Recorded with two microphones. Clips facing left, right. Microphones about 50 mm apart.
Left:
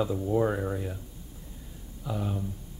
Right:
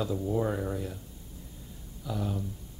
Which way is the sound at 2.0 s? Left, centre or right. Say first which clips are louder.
Left 1 dB; centre.